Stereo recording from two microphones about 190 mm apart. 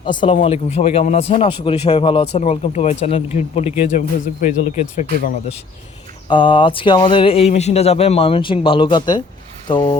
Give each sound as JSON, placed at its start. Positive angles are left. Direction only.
{"t": 0.4, "sound": "speech", "side_deg": 35}
{"t": 6.2, "sound": "speech", "side_deg": 25}